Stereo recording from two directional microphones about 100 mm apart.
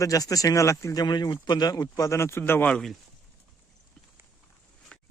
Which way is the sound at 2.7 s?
5° left (ahead or behind).